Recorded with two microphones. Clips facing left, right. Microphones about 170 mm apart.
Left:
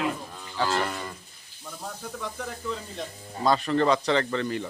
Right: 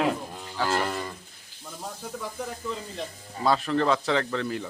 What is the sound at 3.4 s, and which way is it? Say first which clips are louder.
Speech: left 1 dB; centre (ahead or behind).